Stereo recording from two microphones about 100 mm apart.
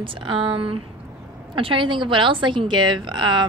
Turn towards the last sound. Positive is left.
turn(degrees=-50)  # may be behind; listen again after turning